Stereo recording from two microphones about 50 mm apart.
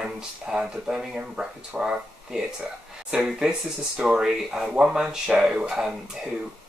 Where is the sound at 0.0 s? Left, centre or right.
Centre.